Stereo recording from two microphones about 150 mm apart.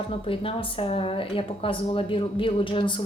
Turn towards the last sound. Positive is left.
turn(degrees=35)  # may be behind; listen again after turning